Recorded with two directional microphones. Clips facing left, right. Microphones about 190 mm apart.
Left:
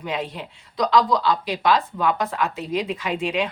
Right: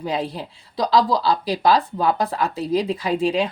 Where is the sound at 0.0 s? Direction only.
35° right (ahead or behind).